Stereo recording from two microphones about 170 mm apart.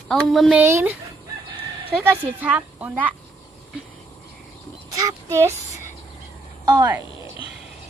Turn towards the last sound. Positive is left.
turn(degrees=-20)  # may be behind; listen again after turning